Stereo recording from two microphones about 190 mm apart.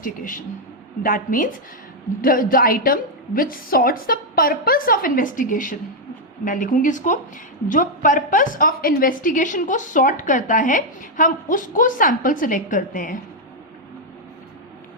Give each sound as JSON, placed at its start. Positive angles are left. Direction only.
{"t": 0.0, "sound": "a woman's voice", "side_deg": 45}